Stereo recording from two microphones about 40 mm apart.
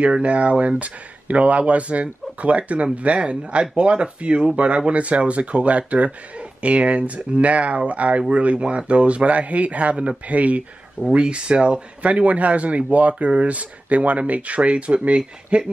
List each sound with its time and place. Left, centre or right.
0.2 s speech: right